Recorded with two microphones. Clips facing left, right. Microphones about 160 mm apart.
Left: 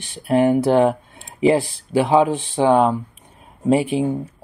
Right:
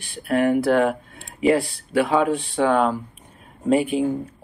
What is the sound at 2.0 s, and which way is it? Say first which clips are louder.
Speech: left 4 dB; 25° left (ahead or behind).